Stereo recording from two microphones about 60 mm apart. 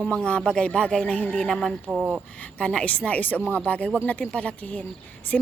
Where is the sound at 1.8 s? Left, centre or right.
Right.